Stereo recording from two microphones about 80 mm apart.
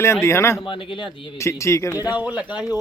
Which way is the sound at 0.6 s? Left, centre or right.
Left.